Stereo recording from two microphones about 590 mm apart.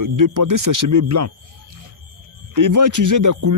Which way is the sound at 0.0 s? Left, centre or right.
Right.